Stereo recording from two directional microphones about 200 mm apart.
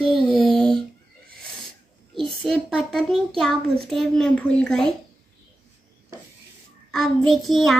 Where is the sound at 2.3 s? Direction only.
Centre (ahead or behind).